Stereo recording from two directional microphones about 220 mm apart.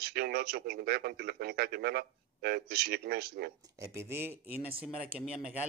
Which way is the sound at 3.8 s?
10° right (ahead or behind).